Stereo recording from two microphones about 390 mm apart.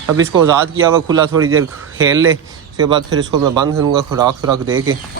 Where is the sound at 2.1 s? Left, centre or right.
Centre.